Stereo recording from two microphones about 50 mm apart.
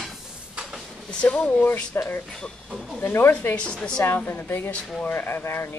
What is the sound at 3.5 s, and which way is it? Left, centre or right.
Speech, left.